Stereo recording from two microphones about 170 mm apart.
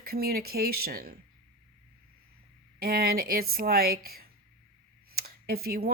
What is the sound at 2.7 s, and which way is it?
Speech, 65° right (ahead or behind).